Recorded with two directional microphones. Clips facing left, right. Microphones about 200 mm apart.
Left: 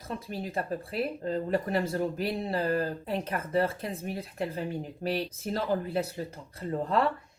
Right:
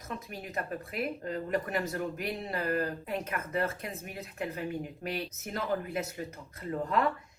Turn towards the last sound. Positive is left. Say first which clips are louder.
# left 3 dB
turn(degrees=30)  # may be behind; listen again after turning